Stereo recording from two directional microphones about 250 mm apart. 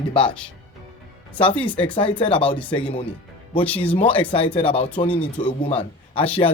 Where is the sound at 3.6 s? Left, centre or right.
Centre.